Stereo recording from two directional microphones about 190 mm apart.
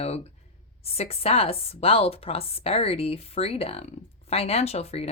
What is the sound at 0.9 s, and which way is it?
Speech, 30° left (ahead or behind).